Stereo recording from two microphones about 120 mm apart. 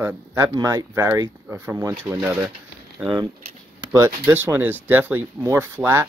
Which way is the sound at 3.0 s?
10° right (ahead or behind).